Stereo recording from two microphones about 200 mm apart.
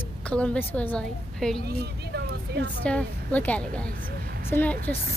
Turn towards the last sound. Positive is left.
turn(degrees=10)  # may be behind; listen again after turning